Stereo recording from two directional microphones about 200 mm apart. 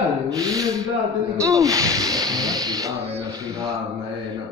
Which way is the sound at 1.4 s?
15° right (ahead or behind).